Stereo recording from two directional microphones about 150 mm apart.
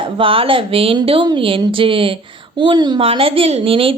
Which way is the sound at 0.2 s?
35° right (ahead or behind).